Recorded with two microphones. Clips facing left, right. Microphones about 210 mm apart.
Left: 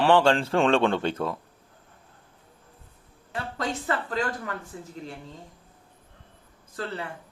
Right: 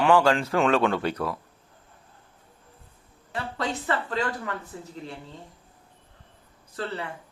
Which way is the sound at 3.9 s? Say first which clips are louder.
Right 1 dB; 45° left (ahead or behind).